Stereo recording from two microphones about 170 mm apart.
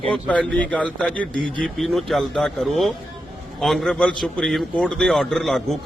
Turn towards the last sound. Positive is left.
turn(degrees=0)  # may be behind; listen again after turning